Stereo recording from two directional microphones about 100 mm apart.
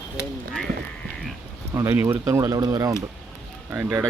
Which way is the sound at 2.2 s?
30° right (ahead or behind).